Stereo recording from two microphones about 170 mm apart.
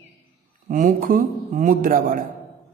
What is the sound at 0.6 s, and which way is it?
A woman's voice, 50° right (ahead or behind).